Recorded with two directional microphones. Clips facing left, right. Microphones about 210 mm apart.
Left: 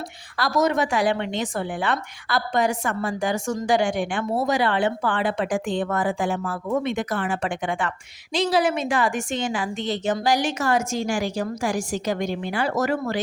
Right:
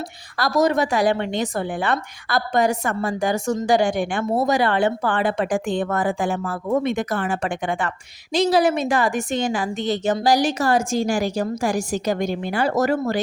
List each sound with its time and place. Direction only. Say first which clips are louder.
0.3 s a woman's voice: right 2 dB; 40° right (ahead or behind)